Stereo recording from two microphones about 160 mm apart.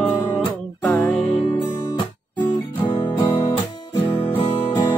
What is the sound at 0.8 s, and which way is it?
Music, 10° left (ahead or behind).